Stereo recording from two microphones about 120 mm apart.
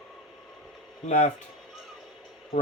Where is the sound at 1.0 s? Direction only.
70° left (ahead or behind).